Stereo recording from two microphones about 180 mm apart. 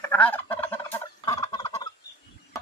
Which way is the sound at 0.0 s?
10° left (ahead or behind).